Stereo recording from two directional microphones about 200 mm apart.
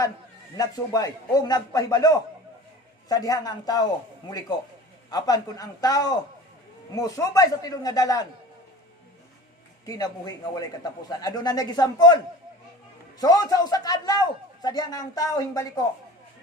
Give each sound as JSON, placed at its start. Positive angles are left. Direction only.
{"t": 0.5, "sound": "a man's voice", "side_deg": 20}
{"t": 9.8, "sound": "a man's voice", "side_deg": 20}